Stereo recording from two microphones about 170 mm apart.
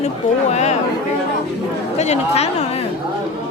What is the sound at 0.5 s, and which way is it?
Speech, 40° left (ahead or behind).